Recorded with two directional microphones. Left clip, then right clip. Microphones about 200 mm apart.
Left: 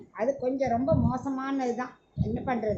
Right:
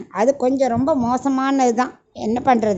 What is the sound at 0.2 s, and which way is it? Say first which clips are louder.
A woman's voice: right 11 dB; 60° right (ahead or behind).